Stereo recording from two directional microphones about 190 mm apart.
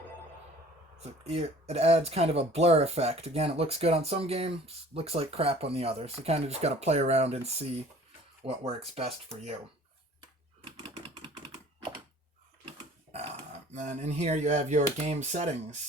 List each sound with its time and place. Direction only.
1.0 s speech: 35° right (ahead or behind)
10.2 s a sound: 20° right (ahead or behind)
13.1 s speech: 35° right (ahead or behind)